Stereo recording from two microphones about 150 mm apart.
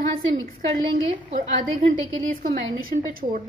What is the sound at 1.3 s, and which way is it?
Speech, 55° right (ahead or behind).